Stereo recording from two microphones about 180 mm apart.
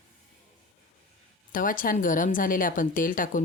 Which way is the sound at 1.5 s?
50° left (ahead or behind).